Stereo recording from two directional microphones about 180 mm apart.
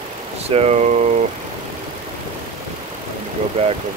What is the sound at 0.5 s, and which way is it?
Speech, 35° right (ahead or behind).